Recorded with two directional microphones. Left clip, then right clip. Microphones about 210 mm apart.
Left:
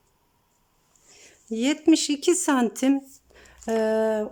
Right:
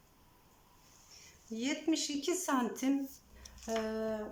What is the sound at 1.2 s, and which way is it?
Speech, 50° left (ahead or behind).